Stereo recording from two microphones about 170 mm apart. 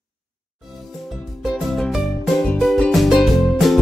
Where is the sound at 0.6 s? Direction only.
Centre (ahead or behind).